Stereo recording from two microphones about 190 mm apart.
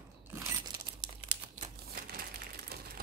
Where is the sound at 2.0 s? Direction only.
55° right (ahead or behind).